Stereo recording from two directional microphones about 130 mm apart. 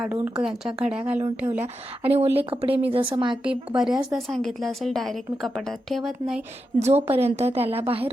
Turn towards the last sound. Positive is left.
turn(degrees=-50)  # may be behind; listen again after turning